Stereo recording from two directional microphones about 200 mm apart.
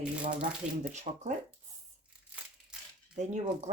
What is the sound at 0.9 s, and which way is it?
Speech, 35° right (ahead or behind).